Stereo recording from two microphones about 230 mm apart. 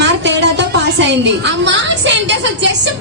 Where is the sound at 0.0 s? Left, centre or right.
Right.